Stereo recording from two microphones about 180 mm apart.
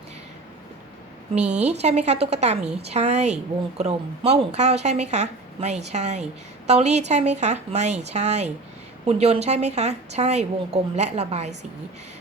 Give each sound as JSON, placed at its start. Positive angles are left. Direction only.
{"t": 1.8, "sound": "speech", "side_deg": -35}